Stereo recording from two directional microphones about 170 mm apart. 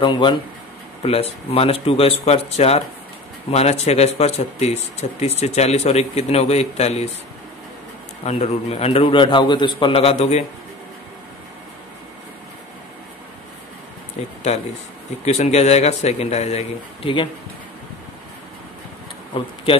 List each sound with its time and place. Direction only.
0.0 s a man's voice: 30° left (ahead or behind)
8.2 s a man's voice: 40° left (ahead or behind)
14.5 s a man's voice: 40° left (ahead or behind)
19.3 s a man's voice: 30° left (ahead or behind)